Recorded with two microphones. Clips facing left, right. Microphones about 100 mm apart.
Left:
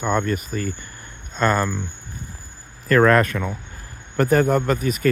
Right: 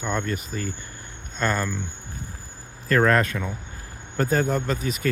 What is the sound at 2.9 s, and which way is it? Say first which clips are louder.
Speech: left 4 dB; 70° left (ahead or behind).